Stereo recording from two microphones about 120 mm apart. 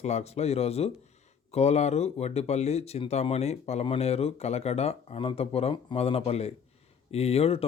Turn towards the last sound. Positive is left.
turn(degrees=55)  # may be behind; listen again after turning